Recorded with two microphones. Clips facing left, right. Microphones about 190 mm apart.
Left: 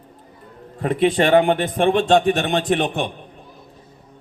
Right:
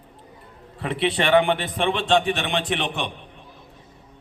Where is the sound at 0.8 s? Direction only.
45° left (ahead or behind).